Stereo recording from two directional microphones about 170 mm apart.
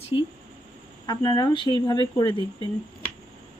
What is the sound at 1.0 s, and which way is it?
Speech, 25° left (ahead or behind).